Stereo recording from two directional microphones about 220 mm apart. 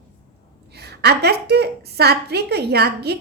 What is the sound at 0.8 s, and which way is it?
A woman's voice, 45° right (ahead or behind).